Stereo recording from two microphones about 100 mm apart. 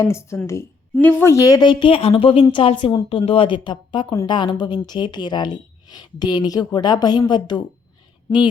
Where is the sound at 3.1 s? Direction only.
70° left (ahead or behind).